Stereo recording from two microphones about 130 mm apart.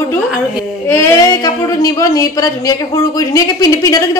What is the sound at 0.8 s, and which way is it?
A woman's voice, 20° left (ahead or behind).